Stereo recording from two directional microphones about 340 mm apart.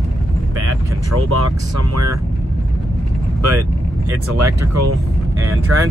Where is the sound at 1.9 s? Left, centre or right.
Right.